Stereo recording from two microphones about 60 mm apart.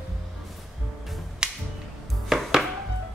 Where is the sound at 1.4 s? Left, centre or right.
Centre.